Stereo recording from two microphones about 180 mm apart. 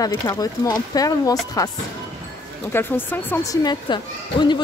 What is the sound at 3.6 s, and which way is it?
Speech, 25° left (ahead or behind).